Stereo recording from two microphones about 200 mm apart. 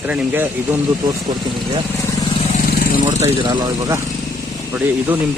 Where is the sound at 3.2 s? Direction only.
20° right (ahead or behind).